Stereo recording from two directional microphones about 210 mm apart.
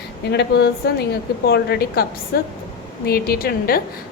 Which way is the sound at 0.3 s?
50° left (ahead or behind).